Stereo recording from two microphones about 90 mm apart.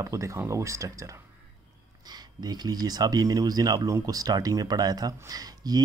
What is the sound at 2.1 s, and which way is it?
Speech, 50° right (ahead or behind).